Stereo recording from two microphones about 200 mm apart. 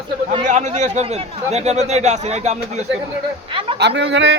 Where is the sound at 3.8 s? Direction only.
60° right (ahead or behind).